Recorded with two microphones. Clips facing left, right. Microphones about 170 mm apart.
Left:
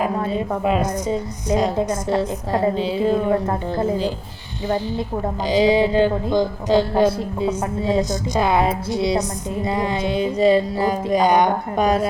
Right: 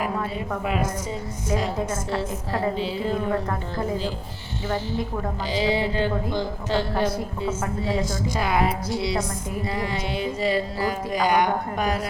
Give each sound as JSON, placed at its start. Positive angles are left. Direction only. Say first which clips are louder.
{"t": 0.0, "sound": "a woman's voice", "louder": "left 6 dB", "side_deg": 25}
{"t": 5.5, "sound": "a woman's voice", "louder": "left 8 dB", "side_deg": 15}